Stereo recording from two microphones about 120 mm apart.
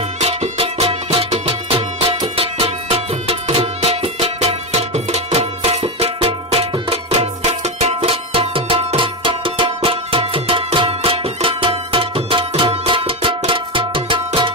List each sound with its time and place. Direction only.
0.2 s music: 60° right (ahead or behind)